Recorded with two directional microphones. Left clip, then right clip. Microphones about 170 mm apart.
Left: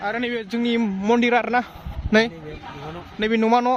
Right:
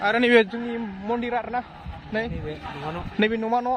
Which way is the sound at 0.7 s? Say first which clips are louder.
Left 8 dB; 80° left.